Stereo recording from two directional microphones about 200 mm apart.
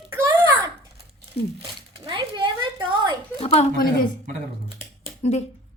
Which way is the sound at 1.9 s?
25° right (ahead or behind).